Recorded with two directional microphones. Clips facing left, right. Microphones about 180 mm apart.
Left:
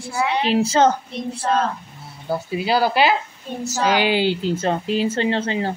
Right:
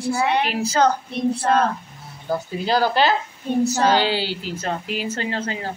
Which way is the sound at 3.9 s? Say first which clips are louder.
Left 2 dB; 15° left (ahead or behind).